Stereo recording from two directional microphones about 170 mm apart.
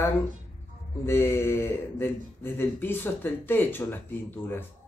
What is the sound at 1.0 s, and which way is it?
Speech, 15° left (ahead or behind).